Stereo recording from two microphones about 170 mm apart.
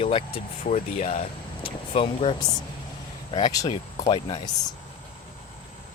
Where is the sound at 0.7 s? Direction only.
45° left (ahead or behind).